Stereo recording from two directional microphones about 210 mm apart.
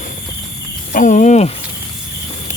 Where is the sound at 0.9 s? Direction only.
35° left (ahead or behind).